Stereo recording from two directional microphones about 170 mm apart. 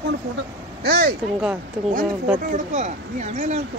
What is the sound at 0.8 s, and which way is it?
Speech, 65° right (ahead or behind).